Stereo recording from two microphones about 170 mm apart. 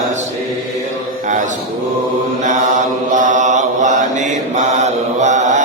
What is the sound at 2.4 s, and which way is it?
Mantra, 45° right (ahead or behind).